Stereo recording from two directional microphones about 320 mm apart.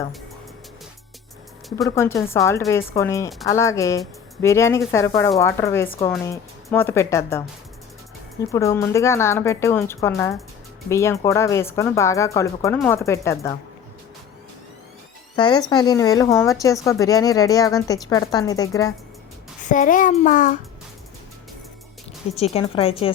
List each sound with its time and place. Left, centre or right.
1.7 s a woman's voice: centre
15.4 s a woman's voice: centre
19.6 s a child's voice: left
22.4 s a woman's voice: centre